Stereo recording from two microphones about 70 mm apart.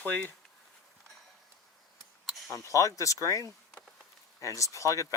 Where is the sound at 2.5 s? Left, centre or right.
Left.